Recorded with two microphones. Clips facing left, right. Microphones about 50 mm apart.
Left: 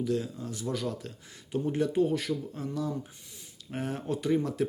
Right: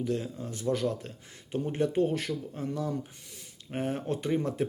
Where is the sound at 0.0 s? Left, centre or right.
Right.